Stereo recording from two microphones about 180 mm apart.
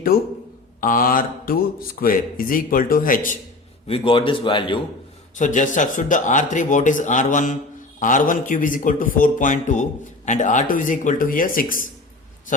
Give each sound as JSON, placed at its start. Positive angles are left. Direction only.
{"t": 0.8, "sound": "speech", "side_deg": 50}
{"t": 3.8, "sound": "a man's voice", "side_deg": 30}
{"t": 5.4, "sound": "speech", "side_deg": 45}